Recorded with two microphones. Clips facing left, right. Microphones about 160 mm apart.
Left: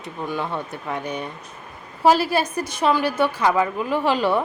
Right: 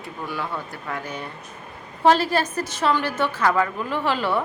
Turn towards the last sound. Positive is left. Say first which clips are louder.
# left 3 dB
turn(degrees=15)  # may be behind; listen again after turning